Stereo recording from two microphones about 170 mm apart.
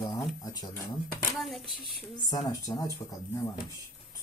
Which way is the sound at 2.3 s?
20° left (ahead or behind).